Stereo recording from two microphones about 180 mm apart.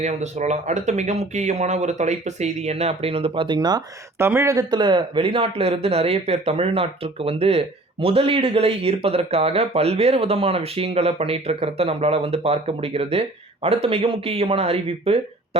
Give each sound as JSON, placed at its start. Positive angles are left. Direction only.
{"t": 0.0, "sound": "speech", "side_deg": -40}